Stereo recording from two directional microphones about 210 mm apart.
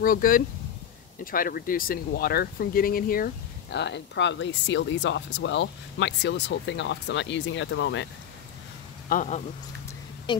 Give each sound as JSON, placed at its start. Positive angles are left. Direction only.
{"t": 0.0, "sound": "speech", "side_deg": 40}
{"t": 3.7, "sound": "speech", "side_deg": 55}
{"t": 9.1, "sound": "speech", "side_deg": 35}